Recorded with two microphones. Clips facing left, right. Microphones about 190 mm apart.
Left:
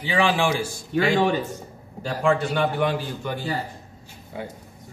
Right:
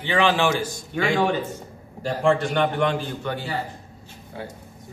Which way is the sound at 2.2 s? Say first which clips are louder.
Right 1 dB; 5° left (ahead or behind).